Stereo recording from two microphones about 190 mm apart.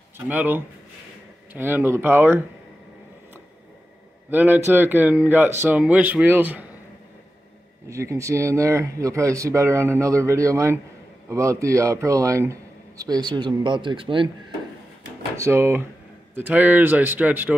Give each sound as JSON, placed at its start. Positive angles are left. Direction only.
{"t": 0.3, "sound": "speech", "side_deg": -10}
{"t": 4.3, "sound": "speech", "side_deg": -10}
{"t": 7.9, "sound": "a man's voice", "side_deg": -15}
{"t": 15.3, "sound": "speech", "side_deg": -15}